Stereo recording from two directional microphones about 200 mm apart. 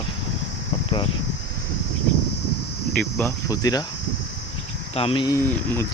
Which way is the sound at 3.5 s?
20° left (ahead or behind).